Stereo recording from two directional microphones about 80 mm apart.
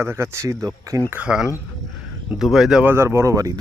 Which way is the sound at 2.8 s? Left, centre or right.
Right.